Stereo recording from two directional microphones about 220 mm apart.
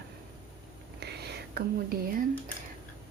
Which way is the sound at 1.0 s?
50° right (ahead or behind).